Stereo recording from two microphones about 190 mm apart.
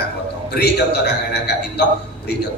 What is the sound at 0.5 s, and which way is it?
A man's voice, 60° left (ahead or behind).